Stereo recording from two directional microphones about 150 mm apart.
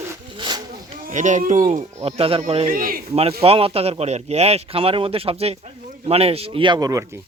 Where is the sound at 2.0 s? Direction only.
40° right (ahead or behind).